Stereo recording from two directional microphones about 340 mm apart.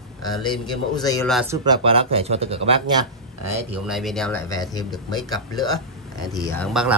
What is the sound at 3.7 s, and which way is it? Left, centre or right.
Speech, centre.